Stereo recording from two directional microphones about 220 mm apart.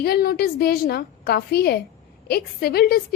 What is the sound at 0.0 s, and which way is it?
A woman's voice, 45° left (ahead or behind).